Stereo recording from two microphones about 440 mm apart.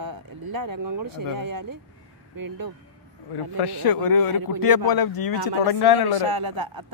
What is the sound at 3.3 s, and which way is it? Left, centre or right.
Speech, left.